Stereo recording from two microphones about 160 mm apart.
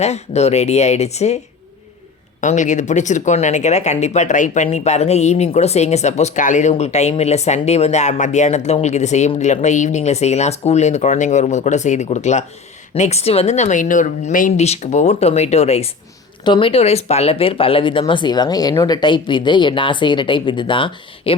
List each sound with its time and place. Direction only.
0.0 s speech: 45° left (ahead or behind)
2.4 s speech: 50° left (ahead or behind)
16.4 s a woman's voice: 30° left (ahead or behind)